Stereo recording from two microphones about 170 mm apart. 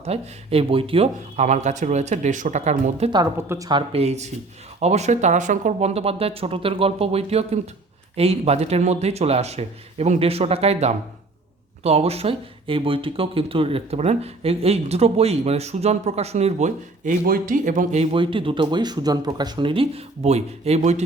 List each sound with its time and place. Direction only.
0.0 s speech: 35° right (ahead or behind)
3.3 s a woman's voice: 15° right (ahead or behind)
3.7 s speech: 30° right (ahead or behind)
17.2 s speech: 55° right (ahead or behind); by 21.0 s 40° right (ahead or behind)